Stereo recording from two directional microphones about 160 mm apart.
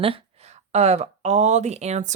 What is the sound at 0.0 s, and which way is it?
Speech, 35° right (ahead or behind).